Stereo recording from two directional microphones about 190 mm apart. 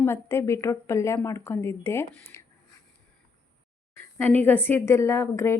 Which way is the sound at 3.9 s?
10° left (ahead or behind).